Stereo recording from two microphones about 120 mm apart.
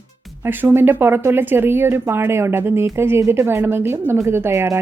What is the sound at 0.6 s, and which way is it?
Speech, 20° right (ahead or behind).